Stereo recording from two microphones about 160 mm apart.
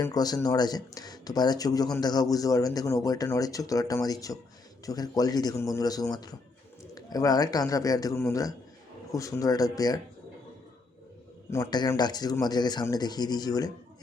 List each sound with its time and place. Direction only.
0.0 s speech: 25° left (ahead or behind)
11.5 s speech: 25° left (ahead or behind)